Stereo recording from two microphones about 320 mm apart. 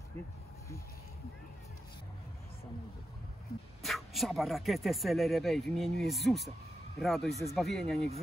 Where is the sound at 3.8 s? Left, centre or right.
Centre.